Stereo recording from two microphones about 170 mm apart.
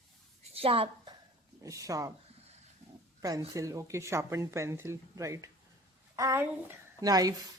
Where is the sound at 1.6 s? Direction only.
20° right (ahead or behind).